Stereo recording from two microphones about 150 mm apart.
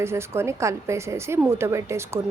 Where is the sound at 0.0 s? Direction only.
15° right (ahead or behind).